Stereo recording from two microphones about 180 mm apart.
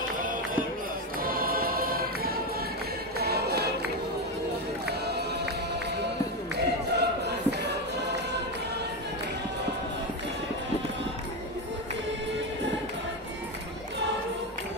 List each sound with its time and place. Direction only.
1.2 s choir: 55° right (ahead or behind)
3.2 s music: 60° right (ahead or behind)
4.8 s run: 65° right (ahead or behind)
6.5 s music: 70° right (ahead or behind)